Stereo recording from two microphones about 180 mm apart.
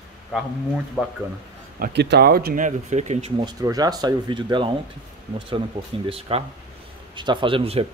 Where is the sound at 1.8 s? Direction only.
65° right (ahead or behind); by 3.5 s 30° right (ahead or behind).